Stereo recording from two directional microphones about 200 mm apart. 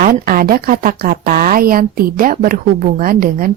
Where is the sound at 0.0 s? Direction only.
45° right (ahead or behind).